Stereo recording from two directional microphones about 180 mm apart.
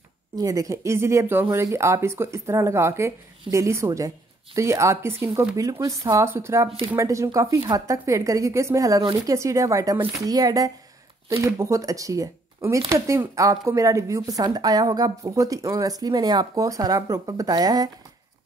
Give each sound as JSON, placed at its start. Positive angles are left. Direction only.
{"t": 0.4, "sound": "speech", "side_deg": -20}